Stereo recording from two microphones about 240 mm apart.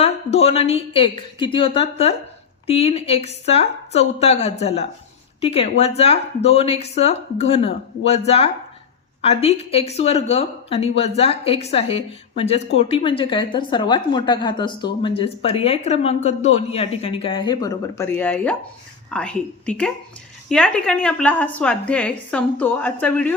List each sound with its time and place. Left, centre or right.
0.0 s a woman's voice: left; by 23.3 s centre